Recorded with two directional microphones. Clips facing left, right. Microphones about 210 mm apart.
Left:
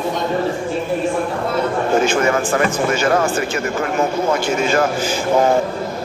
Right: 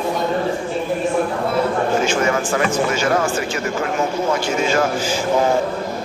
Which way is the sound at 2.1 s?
55° left (ahead or behind).